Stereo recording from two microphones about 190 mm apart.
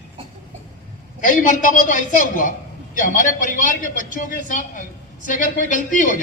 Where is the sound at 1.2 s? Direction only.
45° left (ahead or behind).